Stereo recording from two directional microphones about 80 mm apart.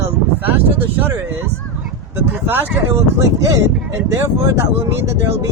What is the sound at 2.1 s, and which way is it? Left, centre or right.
Speech, right.